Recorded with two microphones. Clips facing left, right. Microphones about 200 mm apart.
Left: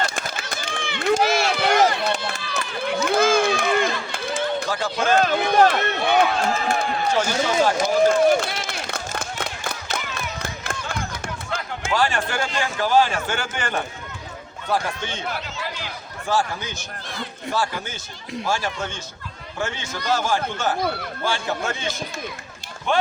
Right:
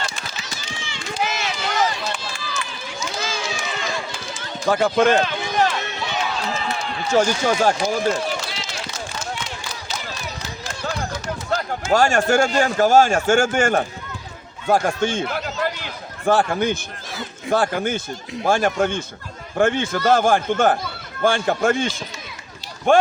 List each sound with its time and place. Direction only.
0.0 s run: 55° left (ahead or behind)
4.7 s speech: 60° right (ahead or behind)
5.2 s speech: 60° left (ahead or behind)
7.1 s speech: 45° right (ahead or behind)
8.2 s a sound: 55° left (ahead or behind)
11.5 s speech: 45° right (ahead or behind)
14.7 s a sound: 45° right (ahead or behind)
17.1 s a sound: 5° right (ahead or behind)
17.5 s speech: 55° right (ahead or behind)